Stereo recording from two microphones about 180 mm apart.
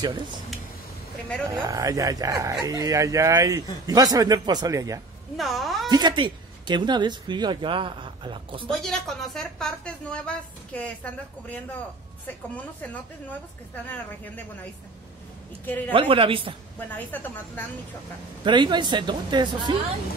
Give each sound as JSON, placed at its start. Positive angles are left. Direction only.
{"t": 1.5, "sound": "speech", "side_deg": -20}
{"t": 5.4, "sound": "a woman's voice", "side_deg": 0}
{"t": 5.9, "sound": "speech", "side_deg": -25}
{"t": 8.6, "sound": "a woman's voice", "side_deg": 0}
{"t": 15.9, "sound": "speech", "side_deg": -30}
{"t": 17.1, "sound": "a woman's voice", "side_deg": 10}
{"t": 18.4, "sound": "speech", "side_deg": -25}